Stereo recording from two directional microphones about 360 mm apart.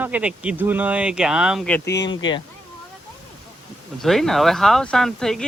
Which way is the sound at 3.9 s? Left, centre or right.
Centre.